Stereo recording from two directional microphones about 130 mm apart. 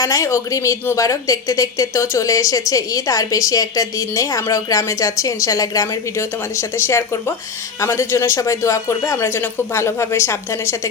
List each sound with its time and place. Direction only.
0.0 s a woman's voice: 25° left (ahead or behind)